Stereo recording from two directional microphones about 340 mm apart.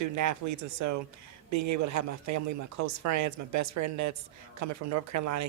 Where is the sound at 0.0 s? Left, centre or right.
Right.